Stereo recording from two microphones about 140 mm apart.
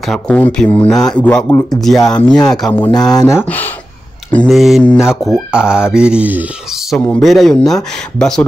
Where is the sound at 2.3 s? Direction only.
30° left (ahead or behind).